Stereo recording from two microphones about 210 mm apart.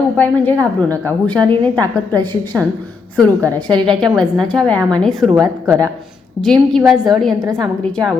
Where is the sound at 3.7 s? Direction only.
5° left (ahead or behind).